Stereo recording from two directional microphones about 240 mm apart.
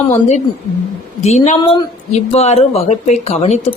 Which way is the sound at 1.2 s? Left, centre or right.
Left.